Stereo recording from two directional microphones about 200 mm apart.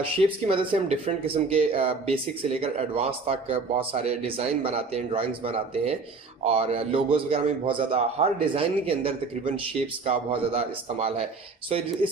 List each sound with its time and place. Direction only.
0.4 s speech: 25° right (ahead or behind)